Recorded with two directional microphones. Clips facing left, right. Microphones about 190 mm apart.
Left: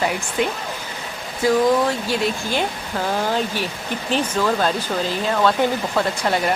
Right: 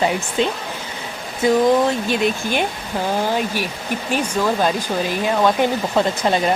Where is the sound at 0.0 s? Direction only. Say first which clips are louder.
Right 3 dB; 25° right (ahead or behind).